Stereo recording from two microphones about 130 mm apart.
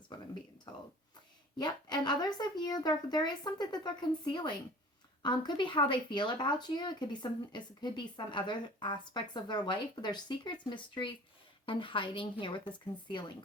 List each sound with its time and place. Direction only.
0.7 s speech: 35° left (ahead or behind)